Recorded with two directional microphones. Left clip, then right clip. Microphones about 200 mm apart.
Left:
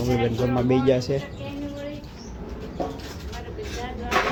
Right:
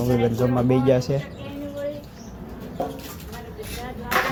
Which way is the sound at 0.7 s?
5° right (ahead or behind).